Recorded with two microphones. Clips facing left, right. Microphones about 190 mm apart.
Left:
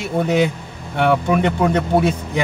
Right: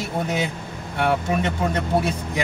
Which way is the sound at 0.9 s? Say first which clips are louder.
Left 5 dB; 60° left (ahead or behind).